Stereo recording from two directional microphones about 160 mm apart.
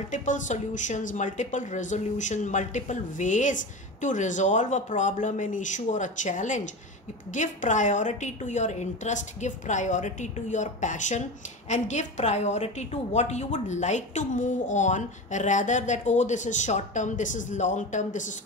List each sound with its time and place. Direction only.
0.1 s a woman's voice: 50° left (ahead or behind)